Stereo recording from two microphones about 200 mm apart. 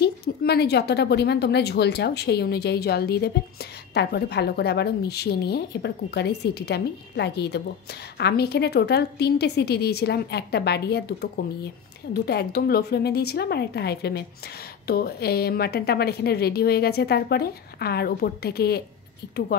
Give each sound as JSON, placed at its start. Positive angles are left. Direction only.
{"t": 0.0, "sound": "a woman's voice", "side_deg": 55}